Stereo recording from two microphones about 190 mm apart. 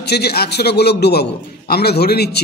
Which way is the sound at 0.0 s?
60° left (ahead or behind).